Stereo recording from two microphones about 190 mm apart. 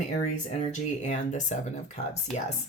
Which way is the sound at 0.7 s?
40° left (ahead or behind).